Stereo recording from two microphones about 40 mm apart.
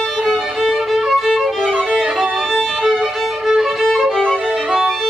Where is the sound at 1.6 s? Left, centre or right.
Centre.